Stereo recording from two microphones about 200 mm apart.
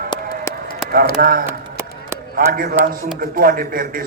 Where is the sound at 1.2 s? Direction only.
45° right (ahead or behind).